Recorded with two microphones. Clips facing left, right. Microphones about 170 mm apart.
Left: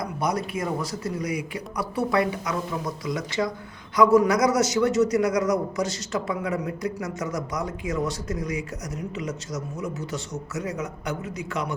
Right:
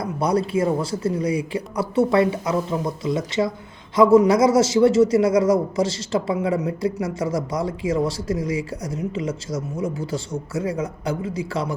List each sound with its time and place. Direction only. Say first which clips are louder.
0.0 s a man's voice: right 5 dB; 30° right (ahead or behind)